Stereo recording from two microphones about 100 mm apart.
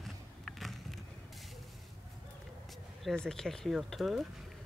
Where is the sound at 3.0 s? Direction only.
5° left (ahead or behind).